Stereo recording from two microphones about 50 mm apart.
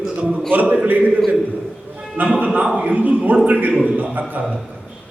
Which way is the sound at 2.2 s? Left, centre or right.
Right.